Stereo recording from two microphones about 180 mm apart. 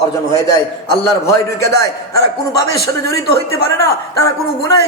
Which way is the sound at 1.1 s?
20° left (ahead or behind).